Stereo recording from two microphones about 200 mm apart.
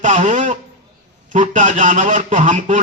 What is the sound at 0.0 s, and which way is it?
A man's voice, 35° right (ahead or behind).